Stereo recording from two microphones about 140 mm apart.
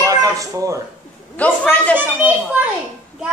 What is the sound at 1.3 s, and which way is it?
Speech, 10° left (ahead or behind).